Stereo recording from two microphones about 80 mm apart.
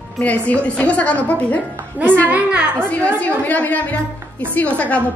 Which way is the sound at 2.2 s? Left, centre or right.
Centre.